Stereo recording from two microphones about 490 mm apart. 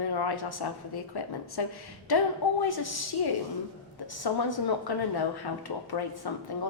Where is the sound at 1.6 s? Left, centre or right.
Left.